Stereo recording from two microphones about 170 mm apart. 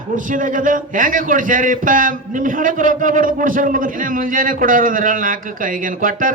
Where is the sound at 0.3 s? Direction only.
50° right (ahead or behind).